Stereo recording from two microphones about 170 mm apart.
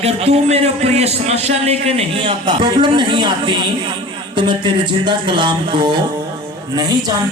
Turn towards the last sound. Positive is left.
turn(degrees=-25)  # may be behind; listen again after turning